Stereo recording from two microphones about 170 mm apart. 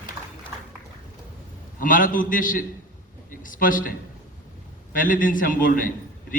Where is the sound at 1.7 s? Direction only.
55° left (ahead or behind).